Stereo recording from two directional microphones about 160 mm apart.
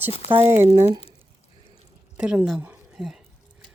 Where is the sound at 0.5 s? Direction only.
40° right (ahead or behind).